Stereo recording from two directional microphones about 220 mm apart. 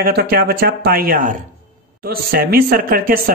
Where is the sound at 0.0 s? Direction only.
45° right (ahead or behind).